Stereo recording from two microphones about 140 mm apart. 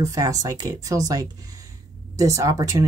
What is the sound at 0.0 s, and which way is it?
Speech, 25° right (ahead or behind).